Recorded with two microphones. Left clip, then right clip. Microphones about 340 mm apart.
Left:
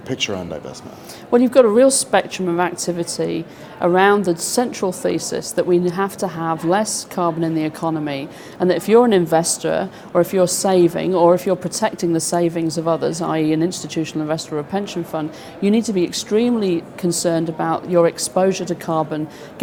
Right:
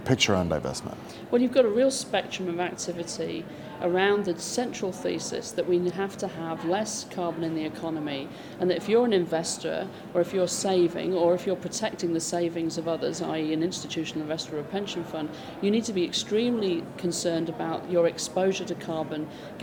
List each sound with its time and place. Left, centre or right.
0.1 s speech: right
1.3 s a woman's voice: left